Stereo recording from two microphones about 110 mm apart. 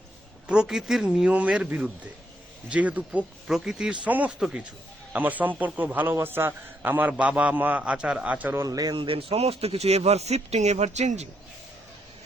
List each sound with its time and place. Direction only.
0.4 s a man's voice: 5° right (ahead or behind)
8.6 s speech: 35° right (ahead or behind)
9.0 s speech: 65° right (ahead or behind); by 11.3 s 90° right